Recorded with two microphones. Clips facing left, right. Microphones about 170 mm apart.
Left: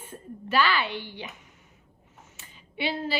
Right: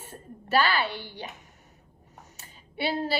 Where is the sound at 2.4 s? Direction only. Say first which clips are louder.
Right 1 dB; 40° right (ahead or behind).